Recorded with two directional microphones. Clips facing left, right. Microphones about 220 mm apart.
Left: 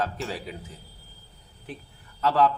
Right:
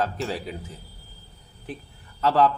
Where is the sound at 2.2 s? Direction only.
30° right (ahead or behind).